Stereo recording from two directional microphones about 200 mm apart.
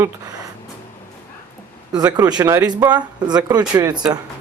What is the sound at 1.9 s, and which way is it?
Speech, 20° right (ahead or behind).